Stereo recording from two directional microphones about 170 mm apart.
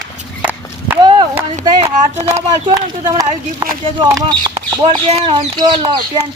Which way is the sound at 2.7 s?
20° right (ahead or behind).